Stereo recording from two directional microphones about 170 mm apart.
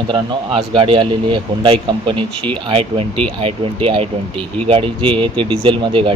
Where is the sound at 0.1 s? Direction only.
30° right (ahead or behind).